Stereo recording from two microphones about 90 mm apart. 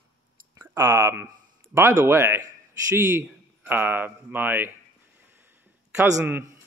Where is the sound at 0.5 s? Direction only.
30° right (ahead or behind).